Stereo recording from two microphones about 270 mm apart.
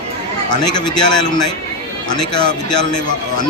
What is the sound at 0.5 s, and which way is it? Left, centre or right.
A man's voice, centre.